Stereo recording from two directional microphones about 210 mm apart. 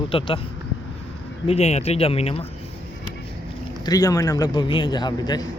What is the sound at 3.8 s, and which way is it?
Speech, 15° left (ahead or behind).